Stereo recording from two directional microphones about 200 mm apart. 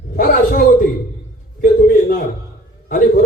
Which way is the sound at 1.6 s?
40° left (ahead or behind).